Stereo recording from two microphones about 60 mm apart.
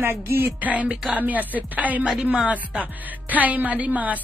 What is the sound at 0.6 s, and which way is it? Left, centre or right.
A woman's voice, right.